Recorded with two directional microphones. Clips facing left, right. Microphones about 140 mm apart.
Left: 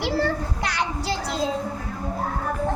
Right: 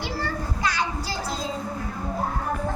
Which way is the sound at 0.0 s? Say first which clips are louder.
Left 6 dB; 65° left (ahead or behind).